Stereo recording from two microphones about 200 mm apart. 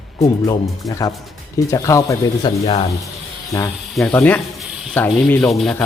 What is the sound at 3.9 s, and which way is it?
Speech, 5° left (ahead or behind).